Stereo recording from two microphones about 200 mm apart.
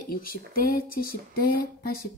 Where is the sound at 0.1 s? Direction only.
45° left (ahead or behind).